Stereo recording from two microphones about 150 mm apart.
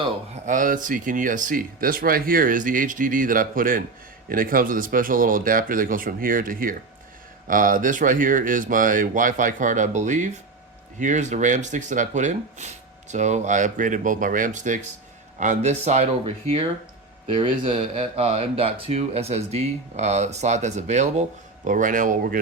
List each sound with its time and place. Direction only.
0.4 s speech: 60° right (ahead or behind)